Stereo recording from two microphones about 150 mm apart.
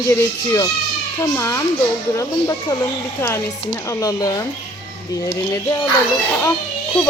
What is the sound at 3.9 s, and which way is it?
Speech, 25° left (ahead or behind).